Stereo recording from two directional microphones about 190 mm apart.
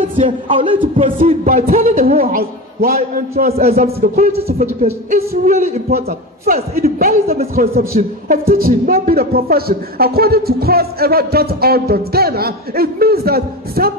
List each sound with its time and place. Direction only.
0.5 s speech: 30° right (ahead or behind)
0.7 s a man's voice: 40° right (ahead or behind)
3.5 s speech: 35° right (ahead or behind)
4.0 s a man's voice: 50° right (ahead or behind)